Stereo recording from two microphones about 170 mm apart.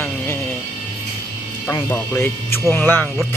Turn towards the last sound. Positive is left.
turn(degrees=10)  # may be behind; listen again after turning